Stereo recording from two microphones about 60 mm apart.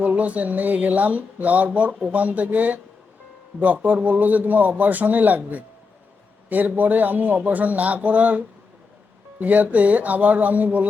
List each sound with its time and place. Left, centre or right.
0.0 s speech: right